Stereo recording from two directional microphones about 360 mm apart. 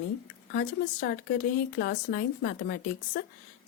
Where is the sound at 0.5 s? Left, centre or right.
Left.